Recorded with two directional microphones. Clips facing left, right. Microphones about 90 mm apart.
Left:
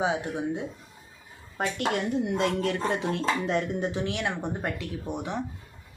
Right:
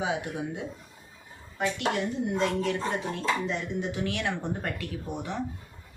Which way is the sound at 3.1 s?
50° left (ahead or behind).